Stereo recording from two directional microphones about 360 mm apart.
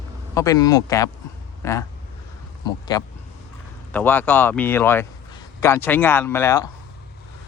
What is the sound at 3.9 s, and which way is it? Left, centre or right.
A man's voice, centre.